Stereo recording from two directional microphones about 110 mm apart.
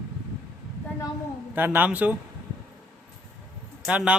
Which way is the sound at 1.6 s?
15° right (ahead or behind).